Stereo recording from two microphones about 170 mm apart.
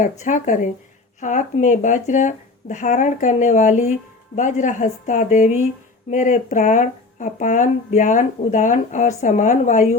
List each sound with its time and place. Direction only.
0.0 s speech: 50° left (ahead or behind)